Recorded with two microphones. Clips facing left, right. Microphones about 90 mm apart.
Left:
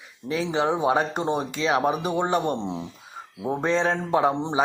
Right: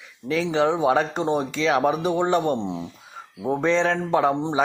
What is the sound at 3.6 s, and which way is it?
Speech, 40° left (ahead or behind).